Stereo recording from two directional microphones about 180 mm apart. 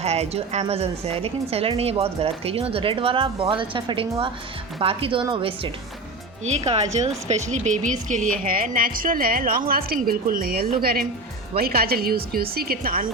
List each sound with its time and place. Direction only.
0.0 s a woman's voice: 35° right (ahead or behind); by 13.1 s 55° right (ahead or behind)